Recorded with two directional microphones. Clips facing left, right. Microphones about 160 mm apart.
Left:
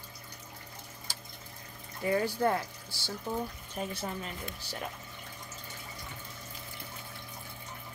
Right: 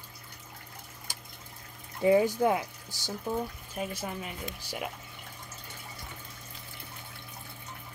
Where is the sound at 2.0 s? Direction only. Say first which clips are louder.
Right 5 dB; 20° right (ahead or behind).